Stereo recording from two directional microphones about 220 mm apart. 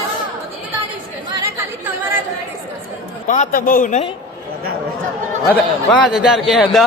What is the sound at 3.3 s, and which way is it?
Speech, 35° left (ahead or behind).